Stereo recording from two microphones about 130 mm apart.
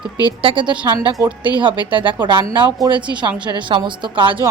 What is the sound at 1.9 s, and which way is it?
Speech, 40° right (ahead or behind).